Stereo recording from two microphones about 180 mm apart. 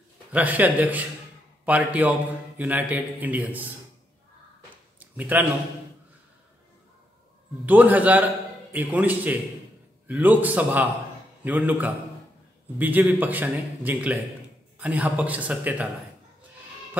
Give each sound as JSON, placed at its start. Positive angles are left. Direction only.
{"t": 0.3, "sound": "a man's voice", "side_deg": -10}
{"t": 5.1, "sound": "a man's voice", "side_deg": -10}
{"t": 7.6, "sound": "a man's voice", "side_deg": -10}